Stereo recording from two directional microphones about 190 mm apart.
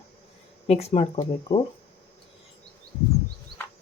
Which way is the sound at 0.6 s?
30° left (ahead or behind).